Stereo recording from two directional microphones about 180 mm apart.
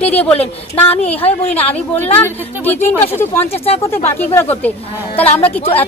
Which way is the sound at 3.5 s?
35° left (ahead or behind).